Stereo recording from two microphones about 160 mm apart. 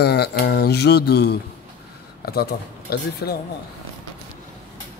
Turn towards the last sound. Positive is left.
turn(degrees=80)